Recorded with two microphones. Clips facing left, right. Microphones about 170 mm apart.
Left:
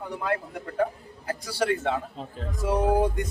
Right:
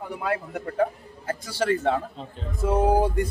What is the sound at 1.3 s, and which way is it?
Speech, 30° right (ahead or behind).